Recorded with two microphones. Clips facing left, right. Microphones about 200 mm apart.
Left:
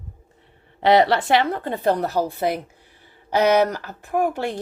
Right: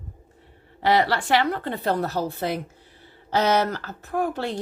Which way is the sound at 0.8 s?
20° left (ahead or behind).